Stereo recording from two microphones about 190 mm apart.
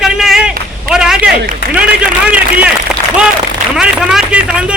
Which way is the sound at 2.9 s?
Centre (ahead or behind).